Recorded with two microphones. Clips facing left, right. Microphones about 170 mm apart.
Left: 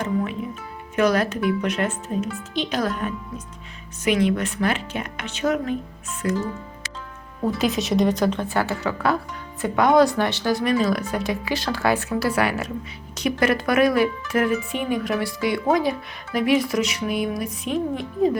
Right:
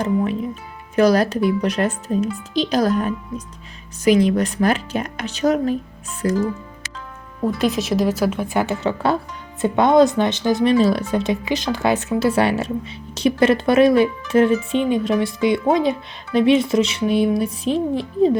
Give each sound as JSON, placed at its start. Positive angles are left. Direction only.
{"t": 0.0, "sound": "speech", "side_deg": -35}
{"t": 7.4, "sound": "a woman's voice", "side_deg": 0}